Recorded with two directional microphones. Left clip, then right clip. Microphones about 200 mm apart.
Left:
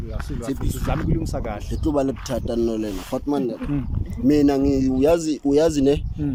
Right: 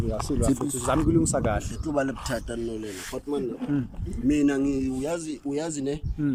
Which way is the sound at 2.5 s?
40° left (ahead or behind).